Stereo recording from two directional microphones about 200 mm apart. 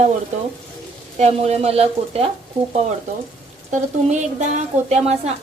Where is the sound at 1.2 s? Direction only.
30° right (ahead or behind).